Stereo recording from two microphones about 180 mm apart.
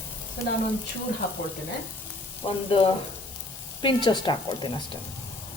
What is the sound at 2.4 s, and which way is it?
Stir, 30° left (ahead or behind).